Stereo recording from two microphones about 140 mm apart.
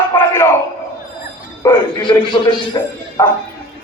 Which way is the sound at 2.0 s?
35° left (ahead or behind).